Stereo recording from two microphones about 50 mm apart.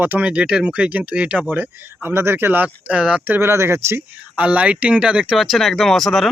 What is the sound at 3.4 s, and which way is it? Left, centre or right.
Speech, right.